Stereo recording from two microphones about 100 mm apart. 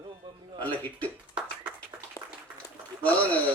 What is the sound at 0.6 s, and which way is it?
Speech, 15° left (ahead or behind).